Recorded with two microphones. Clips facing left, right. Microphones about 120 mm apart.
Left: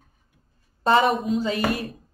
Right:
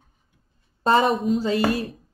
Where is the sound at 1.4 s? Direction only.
30° right (ahead or behind).